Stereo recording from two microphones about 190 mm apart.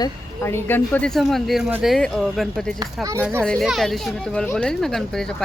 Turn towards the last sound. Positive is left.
turn(degrees=5)  # may be behind; listen again after turning